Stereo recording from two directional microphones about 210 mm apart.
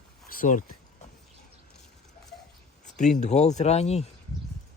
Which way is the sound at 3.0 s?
35° left (ahead or behind).